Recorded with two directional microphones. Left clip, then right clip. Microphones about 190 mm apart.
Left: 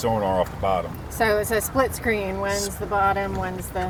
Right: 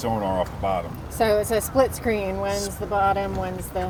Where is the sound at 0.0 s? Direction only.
40° left (ahead or behind).